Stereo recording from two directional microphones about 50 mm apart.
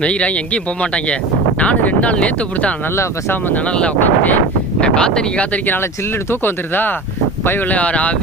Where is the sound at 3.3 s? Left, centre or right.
Left.